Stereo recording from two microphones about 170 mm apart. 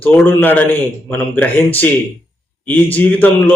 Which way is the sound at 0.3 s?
10° left (ahead or behind).